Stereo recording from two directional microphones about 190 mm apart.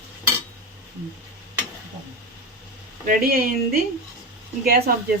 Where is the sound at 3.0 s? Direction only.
50° right (ahead or behind).